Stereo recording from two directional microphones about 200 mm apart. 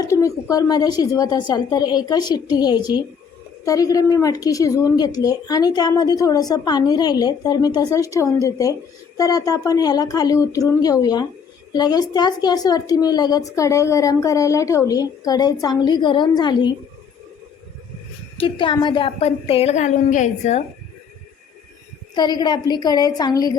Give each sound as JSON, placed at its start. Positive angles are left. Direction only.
{"t": 0.0, "sound": "a woman's voice", "side_deg": 15}
{"t": 18.3, "sound": "a woman's voice", "side_deg": 25}
{"t": 22.1, "sound": "a woman's voice", "side_deg": 20}